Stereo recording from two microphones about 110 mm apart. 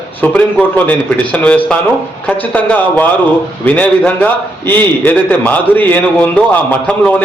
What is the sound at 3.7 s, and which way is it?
A man's voice, 15° left (ahead or behind).